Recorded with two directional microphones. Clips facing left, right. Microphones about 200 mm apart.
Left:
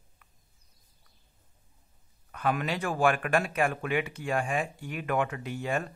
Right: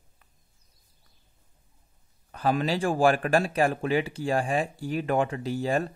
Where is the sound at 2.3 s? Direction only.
30° right (ahead or behind).